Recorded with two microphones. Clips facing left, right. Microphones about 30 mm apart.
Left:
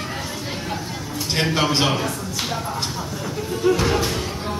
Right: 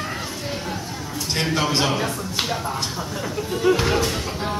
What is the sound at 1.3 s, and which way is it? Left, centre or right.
Speech, centre.